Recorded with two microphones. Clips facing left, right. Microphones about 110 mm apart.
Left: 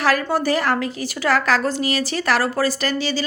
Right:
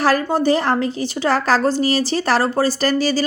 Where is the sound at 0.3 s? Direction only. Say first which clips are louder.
Right 3 dB; 25° right (ahead or behind).